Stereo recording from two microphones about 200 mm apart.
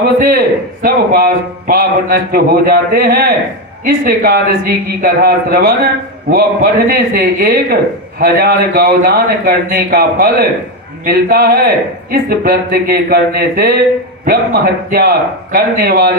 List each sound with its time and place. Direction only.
0.2 s speech: 45° right (ahead or behind)